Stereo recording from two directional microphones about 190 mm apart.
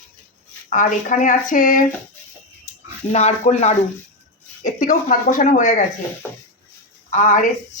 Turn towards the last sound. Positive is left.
turn(degrees=40)  # may be behind; listen again after turning